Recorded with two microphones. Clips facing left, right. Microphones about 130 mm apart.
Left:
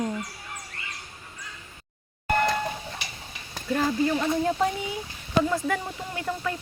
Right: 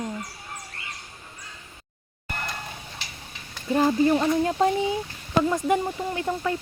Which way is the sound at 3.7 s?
25° right (ahead or behind).